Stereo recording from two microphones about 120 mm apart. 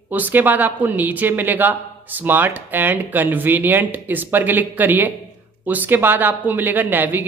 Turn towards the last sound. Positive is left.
turn(degrees=-15)  # may be behind; listen again after turning